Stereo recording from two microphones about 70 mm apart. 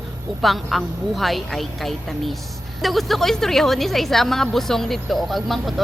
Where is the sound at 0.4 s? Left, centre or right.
Centre.